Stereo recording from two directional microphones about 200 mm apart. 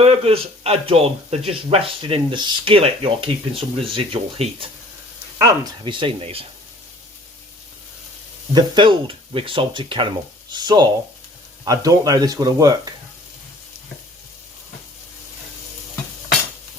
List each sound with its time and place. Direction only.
0.0 s speech: 30° right (ahead or behind)
8.5 s speech: 25° right (ahead or behind)